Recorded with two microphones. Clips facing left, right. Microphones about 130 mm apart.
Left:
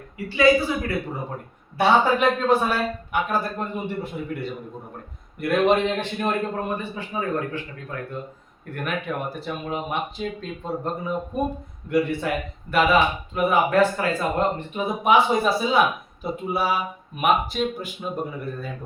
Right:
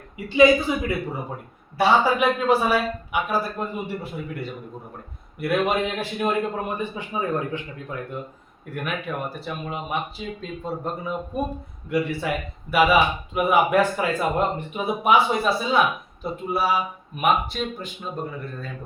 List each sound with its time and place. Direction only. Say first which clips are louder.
0.3 s speech: right 2 dB; 20° right (ahead or behind)
1.8 s speech: left 1 dB; 5° right (ahead or behind)
8.7 s a man's voice: left 1 dB; 5° right (ahead or behind)